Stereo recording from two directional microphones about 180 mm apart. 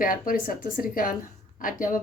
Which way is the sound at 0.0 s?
50° left (ahead or behind).